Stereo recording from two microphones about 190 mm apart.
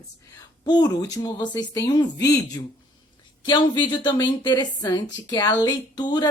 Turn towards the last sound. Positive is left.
turn(degrees=20)  # may be behind; listen again after turning